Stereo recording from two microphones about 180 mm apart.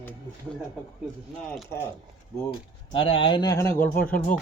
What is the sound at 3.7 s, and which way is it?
Speech, 10° left (ahead or behind).